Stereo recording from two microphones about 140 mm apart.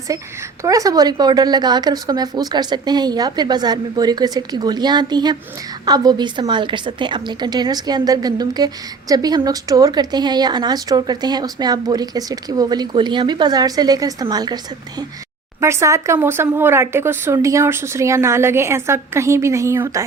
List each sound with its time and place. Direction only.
0.6 s a woman's voice: 25° right (ahead or behind)